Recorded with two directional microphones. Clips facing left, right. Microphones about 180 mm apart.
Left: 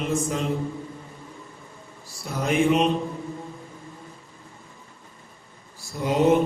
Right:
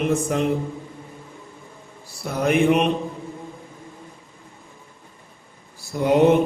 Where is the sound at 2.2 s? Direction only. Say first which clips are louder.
Right 3 dB; 60° right (ahead or behind).